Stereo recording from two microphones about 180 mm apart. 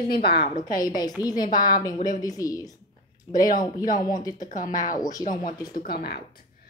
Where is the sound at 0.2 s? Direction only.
55° left (ahead or behind).